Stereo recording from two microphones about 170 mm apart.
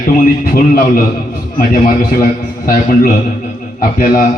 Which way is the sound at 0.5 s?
55° left (ahead or behind).